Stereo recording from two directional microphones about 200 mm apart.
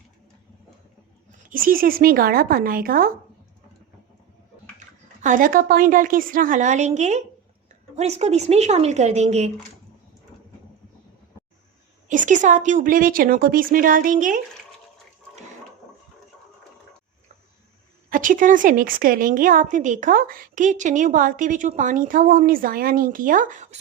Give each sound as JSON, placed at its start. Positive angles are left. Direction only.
{"t": 1.5, "sound": "a woman's voice", "side_deg": -45}
{"t": 4.8, "sound": "speech", "side_deg": -40}
{"t": 12.0, "sound": "a woman's voice", "side_deg": -40}
{"t": 18.1, "sound": "a woman's voice", "side_deg": -45}